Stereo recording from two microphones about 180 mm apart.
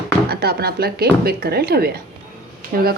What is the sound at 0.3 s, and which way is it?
A woman's voice, 60° right (ahead or behind).